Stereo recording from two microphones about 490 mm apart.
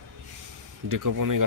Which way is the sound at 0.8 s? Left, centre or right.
Right.